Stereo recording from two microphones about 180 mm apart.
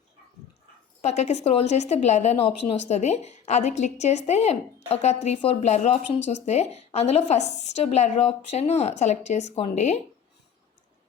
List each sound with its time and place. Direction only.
1.0 s a woman's voice: 40° left (ahead or behind)